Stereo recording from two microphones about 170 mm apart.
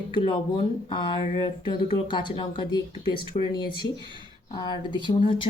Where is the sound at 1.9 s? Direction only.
25° left (ahead or behind).